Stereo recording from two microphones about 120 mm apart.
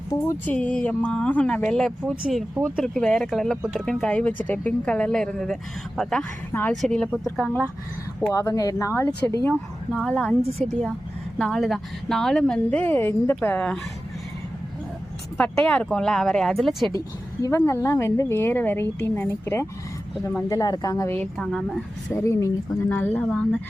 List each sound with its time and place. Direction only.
0.4 s a woman's voice: 10° left (ahead or behind)
6.5 s speech: 15° left (ahead or behind)
6.8 s a woman's voice: 5° left (ahead or behind)
8.3 s speech: 25° left (ahead or behind)
9.9 s a woman's voice: centre (ahead or behind)
15.4 s a woman's voice: 5° left (ahead or behind)
17.4 s speech: 25° left (ahead or behind)
20.5 s speech: 35° left (ahead or behind)
21.1 s speech: 10° left (ahead or behind)
22.1 s speech: 25° left (ahead or behind)